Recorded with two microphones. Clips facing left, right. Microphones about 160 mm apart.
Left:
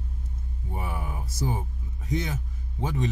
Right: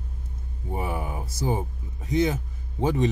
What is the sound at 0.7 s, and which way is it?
Speech, 20° right (ahead or behind).